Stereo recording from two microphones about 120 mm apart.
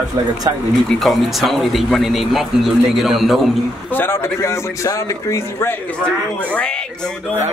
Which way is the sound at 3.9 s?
20° left (ahead or behind).